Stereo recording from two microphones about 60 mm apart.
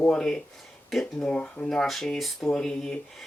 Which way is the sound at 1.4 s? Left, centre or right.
Left.